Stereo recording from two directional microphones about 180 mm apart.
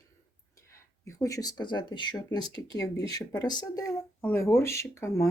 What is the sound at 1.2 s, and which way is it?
Speech, 20° left (ahead or behind).